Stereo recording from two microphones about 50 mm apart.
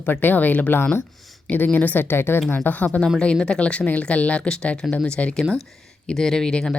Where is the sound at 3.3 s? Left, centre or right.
Centre.